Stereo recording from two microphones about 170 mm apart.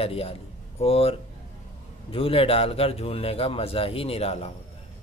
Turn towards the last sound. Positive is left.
turn(degrees=40)  # may be behind; listen again after turning